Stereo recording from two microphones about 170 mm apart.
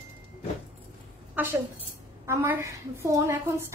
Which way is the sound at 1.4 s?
10° right (ahead or behind).